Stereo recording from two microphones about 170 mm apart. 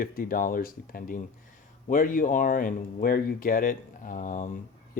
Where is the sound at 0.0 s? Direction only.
55° left (ahead or behind).